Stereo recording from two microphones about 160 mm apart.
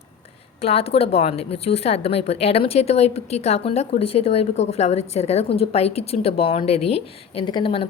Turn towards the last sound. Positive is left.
turn(degrees=35)  # may be behind; listen again after turning